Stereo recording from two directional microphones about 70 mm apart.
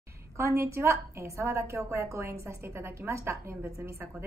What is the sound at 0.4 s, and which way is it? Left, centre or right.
A woman's voice, right.